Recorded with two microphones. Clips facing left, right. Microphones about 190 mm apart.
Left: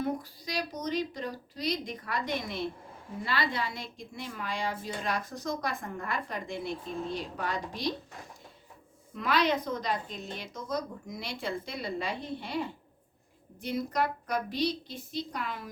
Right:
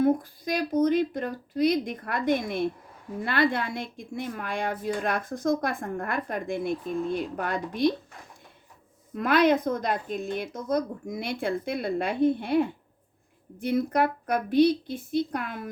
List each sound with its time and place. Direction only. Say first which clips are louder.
0.0 s a woman's voice: right 10 dB; 50° right (ahead or behind)
9.1 s a woman's voice: right 7 dB; 55° right (ahead or behind)